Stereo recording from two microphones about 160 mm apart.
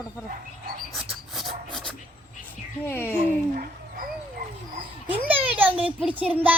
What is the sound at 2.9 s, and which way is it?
Speech, 15° left (ahead or behind).